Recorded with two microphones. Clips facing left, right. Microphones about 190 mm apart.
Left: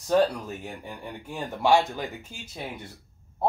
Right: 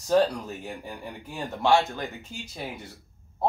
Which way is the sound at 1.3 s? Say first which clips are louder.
Left 1 dB; 10° left (ahead or behind).